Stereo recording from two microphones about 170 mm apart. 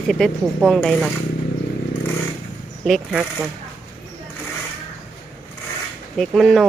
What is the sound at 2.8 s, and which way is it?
Speech, centre (ahead or behind).